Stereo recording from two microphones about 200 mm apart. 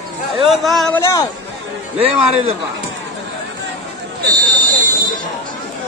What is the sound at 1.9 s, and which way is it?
Speech, 30° right (ahead or behind).